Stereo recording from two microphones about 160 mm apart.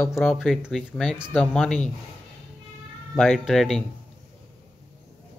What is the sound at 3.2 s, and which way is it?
Speech, centre (ahead or behind).